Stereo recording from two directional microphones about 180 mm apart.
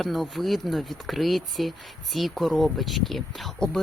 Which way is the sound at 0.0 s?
Centre (ahead or behind).